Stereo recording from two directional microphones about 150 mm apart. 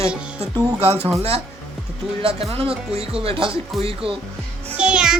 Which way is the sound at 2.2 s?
40° right (ahead or behind).